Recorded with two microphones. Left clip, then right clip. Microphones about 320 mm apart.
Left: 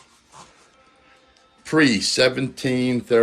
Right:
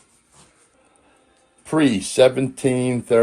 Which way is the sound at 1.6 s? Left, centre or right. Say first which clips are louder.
Left 1 dB; centre.